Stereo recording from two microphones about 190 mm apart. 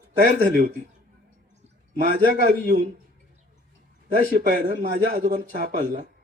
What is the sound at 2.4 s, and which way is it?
Speech, 45° right (ahead or behind).